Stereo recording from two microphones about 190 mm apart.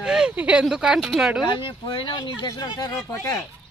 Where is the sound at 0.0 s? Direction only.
5° right (ahead or behind).